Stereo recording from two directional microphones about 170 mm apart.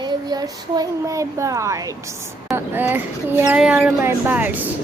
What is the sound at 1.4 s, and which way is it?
A woman's voice, 20° right (ahead or behind).